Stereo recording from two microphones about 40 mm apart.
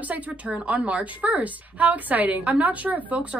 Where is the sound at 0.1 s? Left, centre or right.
Right.